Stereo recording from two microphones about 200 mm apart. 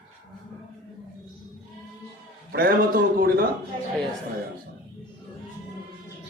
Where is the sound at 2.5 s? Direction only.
45° right (ahead or behind).